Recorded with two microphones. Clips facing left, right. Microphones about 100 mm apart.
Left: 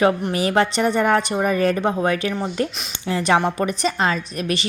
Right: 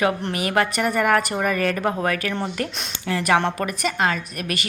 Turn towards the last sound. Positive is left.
turn(degrees=25)  # may be behind; listen again after turning